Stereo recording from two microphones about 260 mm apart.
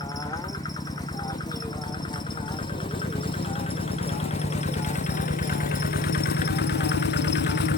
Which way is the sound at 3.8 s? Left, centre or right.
Left.